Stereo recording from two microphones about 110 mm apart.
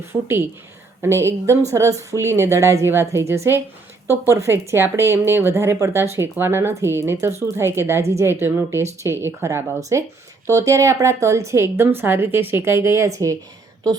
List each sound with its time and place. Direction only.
0.0 s speech: 20° right (ahead or behind)